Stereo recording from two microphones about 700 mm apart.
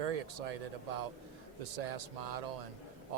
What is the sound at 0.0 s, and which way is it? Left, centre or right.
Speech, right.